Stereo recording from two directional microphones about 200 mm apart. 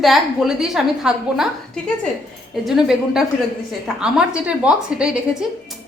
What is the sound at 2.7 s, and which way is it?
A woman's voice, centre (ahead or behind).